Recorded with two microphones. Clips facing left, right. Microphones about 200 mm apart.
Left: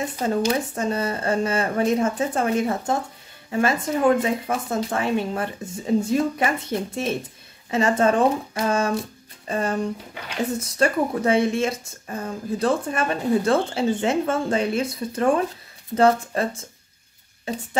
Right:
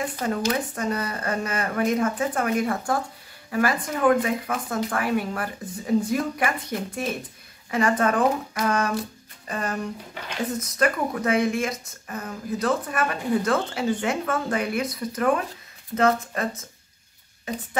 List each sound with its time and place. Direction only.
0.0 s speech: 25° left (ahead or behind)